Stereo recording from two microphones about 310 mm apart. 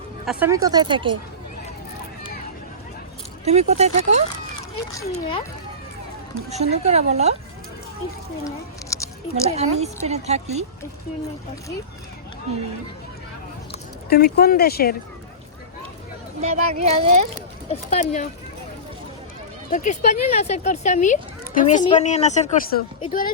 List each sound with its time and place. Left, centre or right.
0.3 s speech: centre
3.4 s a woman's voice: right
4.9 s a child's voice: centre
6.5 s a woman's voice: right
8.4 s a sound: centre
9.3 s a woman's voice: centre
14.1 s speech: left
16.4 s a woman's voice: right
17.7 s speech: left
19.7 s speech: left